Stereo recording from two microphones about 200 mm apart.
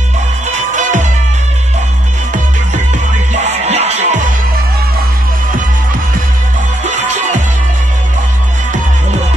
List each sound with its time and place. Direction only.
3.6 s music: 35° right (ahead or behind)